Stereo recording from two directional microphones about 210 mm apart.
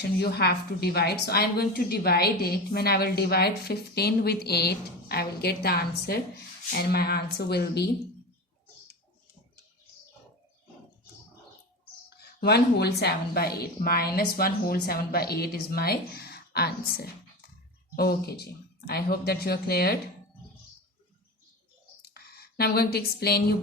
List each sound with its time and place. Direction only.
0.2 s a woman's voice: 50° left (ahead or behind)
12.1 s a woman's voice: 50° left (ahead or behind)
22.1 s speech: 45° left (ahead or behind)